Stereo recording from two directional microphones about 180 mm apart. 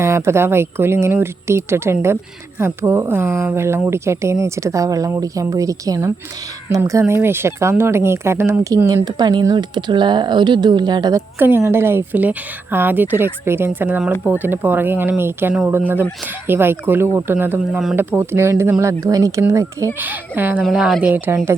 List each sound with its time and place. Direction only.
0.0 s speech: 15° right (ahead or behind)
11.3 s speech: 10° right (ahead or behind)
17.9 s a woman's voice: 10° right (ahead or behind)